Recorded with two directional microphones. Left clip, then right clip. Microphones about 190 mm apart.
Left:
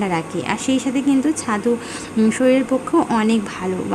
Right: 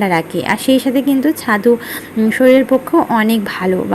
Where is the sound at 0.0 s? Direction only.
15° right (ahead or behind).